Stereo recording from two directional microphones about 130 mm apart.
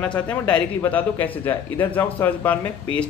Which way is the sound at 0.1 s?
10° left (ahead or behind).